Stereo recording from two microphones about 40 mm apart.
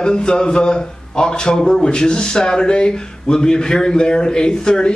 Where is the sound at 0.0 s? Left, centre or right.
Left.